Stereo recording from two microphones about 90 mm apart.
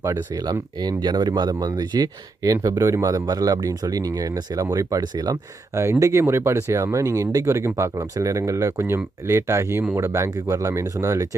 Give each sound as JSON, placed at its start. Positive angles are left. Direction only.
{"t": 0.8, "sound": "speech", "side_deg": -50}
{"t": 5.7, "sound": "speech", "side_deg": -30}